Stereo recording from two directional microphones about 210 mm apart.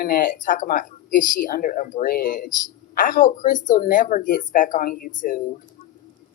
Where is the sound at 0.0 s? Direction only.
40° left (ahead or behind).